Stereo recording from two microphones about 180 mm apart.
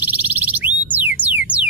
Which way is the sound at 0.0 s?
10° right (ahead or behind).